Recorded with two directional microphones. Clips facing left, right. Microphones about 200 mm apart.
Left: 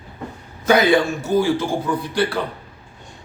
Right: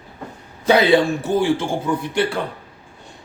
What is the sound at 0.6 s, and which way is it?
A man's voice, 30° right (ahead or behind).